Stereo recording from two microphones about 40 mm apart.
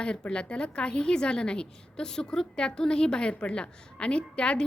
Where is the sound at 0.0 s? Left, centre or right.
Left.